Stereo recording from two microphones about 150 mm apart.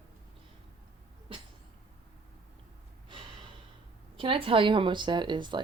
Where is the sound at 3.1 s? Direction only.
30° right (ahead or behind).